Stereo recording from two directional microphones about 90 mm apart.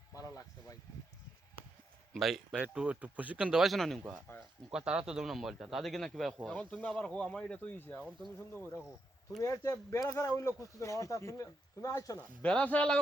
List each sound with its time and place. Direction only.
0.1 s a sound: 40° left (ahead or behind)
2.1 s speech: centre (ahead or behind)
3.7 s speech: centre (ahead or behind); by 8.8 s 20° left (ahead or behind)
9.4 s speech: 35° left (ahead or behind)
12.4 s speech: 15° left (ahead or behind)